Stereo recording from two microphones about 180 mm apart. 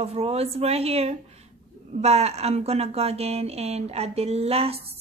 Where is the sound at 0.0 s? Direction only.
35° right (ahead or behind).